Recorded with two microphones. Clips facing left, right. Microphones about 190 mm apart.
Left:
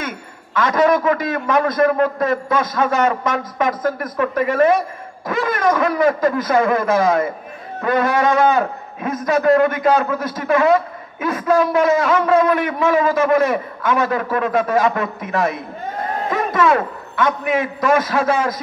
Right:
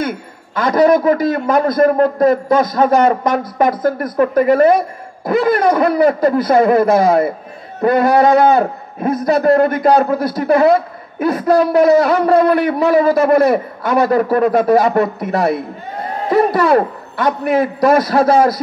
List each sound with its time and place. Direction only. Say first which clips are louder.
0.6 s a man's voice: right 4 dB; 35° right (ahead or behind)